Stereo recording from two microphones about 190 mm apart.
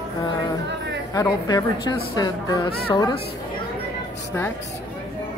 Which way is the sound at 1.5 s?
20° left (ahead or behind).